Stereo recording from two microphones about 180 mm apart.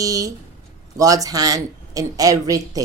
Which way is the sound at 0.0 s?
20° right (ahead or behind).